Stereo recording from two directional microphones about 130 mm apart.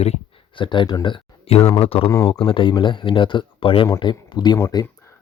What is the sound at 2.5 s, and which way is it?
Speech, 40° left (ahead or behind).